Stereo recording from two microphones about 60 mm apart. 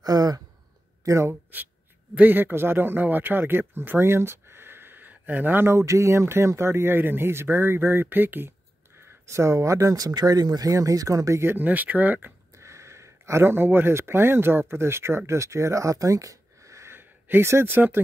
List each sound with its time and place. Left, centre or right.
0.0 s a sound: right
1.0 s speech: right
2.1 s speech: right
9.3 s speech: right
11.4 s speech: right
12.5 s speech: right
16.9 s speech: right